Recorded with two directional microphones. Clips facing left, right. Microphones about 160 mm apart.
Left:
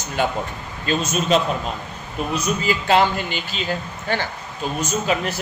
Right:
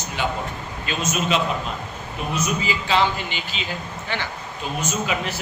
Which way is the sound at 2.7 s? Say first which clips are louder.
Left 5 dB; 50° left (ahead or behind).